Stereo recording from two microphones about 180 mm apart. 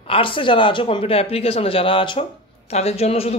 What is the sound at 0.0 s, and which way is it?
A man's voice, 30° left (ahead or behind).